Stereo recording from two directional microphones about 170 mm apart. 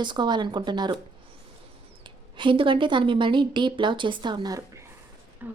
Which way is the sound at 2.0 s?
30° right (ahead or behind).